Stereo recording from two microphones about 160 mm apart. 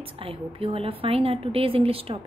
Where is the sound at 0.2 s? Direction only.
35° right (ahead or behind).